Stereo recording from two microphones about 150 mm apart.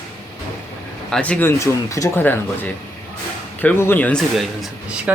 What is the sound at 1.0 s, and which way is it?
Speech, 5° left (ahead or behind).